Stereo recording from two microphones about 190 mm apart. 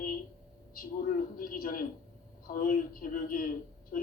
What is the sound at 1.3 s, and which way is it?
A woman's voice, 50° left (ahead or behind).